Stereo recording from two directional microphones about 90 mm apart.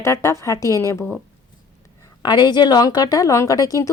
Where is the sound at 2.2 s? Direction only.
55° left (ahead or behind).